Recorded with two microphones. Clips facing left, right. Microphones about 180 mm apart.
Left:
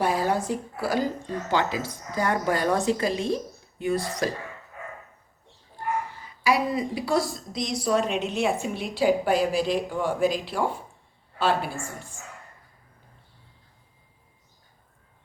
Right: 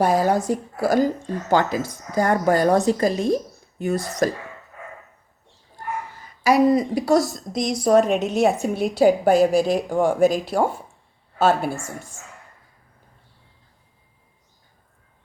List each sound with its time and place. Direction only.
0.0 s a woman's voice: 45° right (ahead or behind)
6.4 s a woman's voice: 40° right (ahead or behind)